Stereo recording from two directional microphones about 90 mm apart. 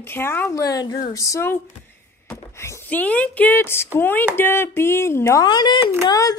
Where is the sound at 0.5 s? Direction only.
45° left (ahead or behind).